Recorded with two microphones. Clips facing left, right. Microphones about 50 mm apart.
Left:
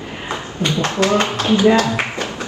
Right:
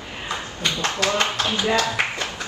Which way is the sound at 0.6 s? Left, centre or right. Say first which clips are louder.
Left 6 dB; left.